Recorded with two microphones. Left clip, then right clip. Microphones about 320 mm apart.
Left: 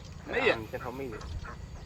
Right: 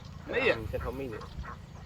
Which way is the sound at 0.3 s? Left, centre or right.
Centre.